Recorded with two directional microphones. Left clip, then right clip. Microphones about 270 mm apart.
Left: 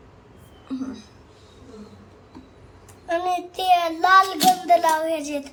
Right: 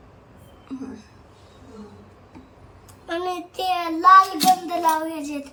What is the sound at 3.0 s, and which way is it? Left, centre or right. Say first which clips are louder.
Child singing: left 4 dB; centre.